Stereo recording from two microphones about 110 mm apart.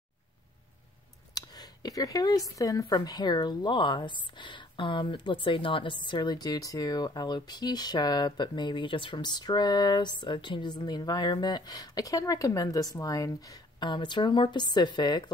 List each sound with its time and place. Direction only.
1.3 s speech: 35° left (ahead or behind)